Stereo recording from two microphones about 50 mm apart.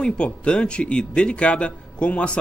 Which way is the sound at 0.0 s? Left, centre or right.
Left.